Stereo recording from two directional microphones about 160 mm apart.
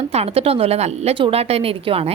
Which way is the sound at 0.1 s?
40° right (ahead or behind).